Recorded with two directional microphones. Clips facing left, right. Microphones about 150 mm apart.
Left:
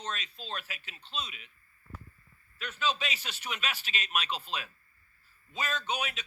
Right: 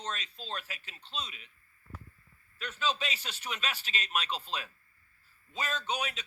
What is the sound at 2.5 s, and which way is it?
A man's voice, 30° right (ahead or behind).